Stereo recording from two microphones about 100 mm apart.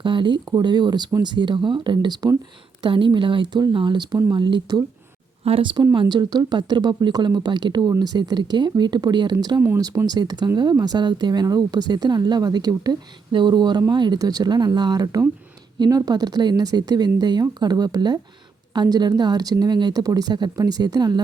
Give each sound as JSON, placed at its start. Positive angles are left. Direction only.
{"t": 0.0, "sound": "speech", "side_deg": -55}
{"t": 2.8, "sound": "speech", "side_deg": -55}
{"t": 5.5, "sound": "speech", "side_deg": -70}
{"t": 5.7, "sound": "speech", "side_deg": -45}